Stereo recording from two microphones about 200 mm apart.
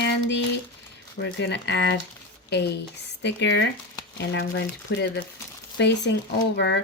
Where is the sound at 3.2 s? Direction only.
65° left (ahead or behind).